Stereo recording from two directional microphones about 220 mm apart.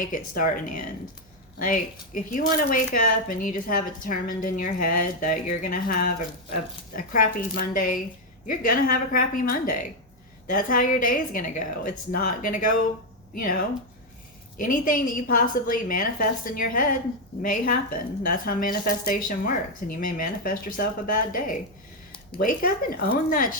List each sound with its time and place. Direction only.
0.0 s speech: 40° left (ahead or behind)